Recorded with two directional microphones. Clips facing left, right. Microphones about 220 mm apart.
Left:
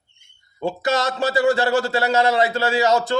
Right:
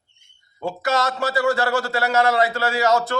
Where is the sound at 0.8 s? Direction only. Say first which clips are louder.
Left 1 dB; 20° left (ahead or behind).